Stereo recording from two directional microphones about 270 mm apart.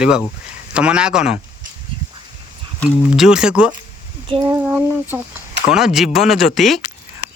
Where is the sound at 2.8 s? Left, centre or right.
Centre.